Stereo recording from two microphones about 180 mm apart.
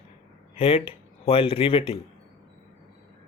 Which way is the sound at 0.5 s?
30° left (ahead or behind).